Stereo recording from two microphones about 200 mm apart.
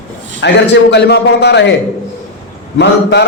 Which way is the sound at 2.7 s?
60° left (ahead or behind).